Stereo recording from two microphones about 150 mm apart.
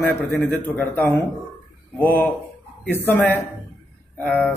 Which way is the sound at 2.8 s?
15° left (ahead or behind).